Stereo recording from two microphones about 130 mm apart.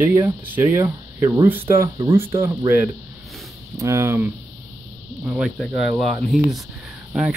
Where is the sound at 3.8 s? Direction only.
20° right (ahead or behind).